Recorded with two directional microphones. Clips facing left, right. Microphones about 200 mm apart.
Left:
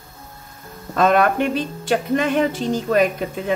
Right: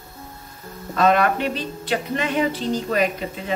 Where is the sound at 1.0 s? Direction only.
50° left (ahead or behind).